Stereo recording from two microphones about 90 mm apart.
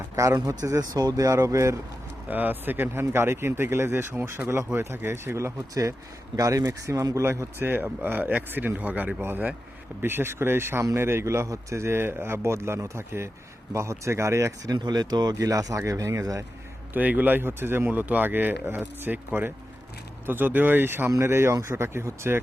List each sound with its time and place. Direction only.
0.2 s speech: 40° right (ahead or behind)
2.2 s speech: 20° right (ahead or behind)
14.8 s speech: 50° right (ahead or behind)
16.9 s speech: 20° right (ahead or behind)